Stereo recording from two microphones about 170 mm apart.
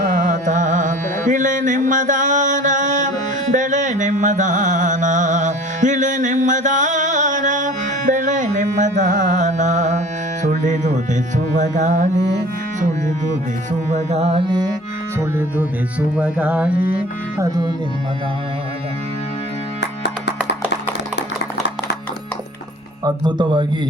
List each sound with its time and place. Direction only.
0.2 s music: 50° right (ahead or behind)
10.4 s speech: 45° right (ahead or behind)
13.9 s music: 40° right (ahead or behind)
15.4 s music: 10° right (ahead or behind)
17.3 s speech: 20° right (ahead or behind)
19.8 s music: 90° left
23.0 s speech: 25° right (ahead or behind)